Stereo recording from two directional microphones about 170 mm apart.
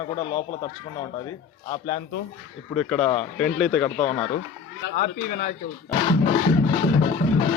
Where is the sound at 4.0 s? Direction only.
45° left (ahead or behind).